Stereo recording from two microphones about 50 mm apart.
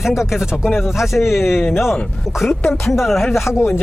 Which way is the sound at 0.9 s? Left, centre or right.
Centre.